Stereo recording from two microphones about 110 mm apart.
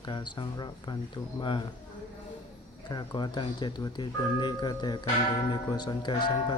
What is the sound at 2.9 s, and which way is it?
Speech, 40° left (ahead or behind).